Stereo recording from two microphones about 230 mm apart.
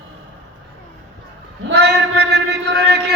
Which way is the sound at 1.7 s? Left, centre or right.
Right.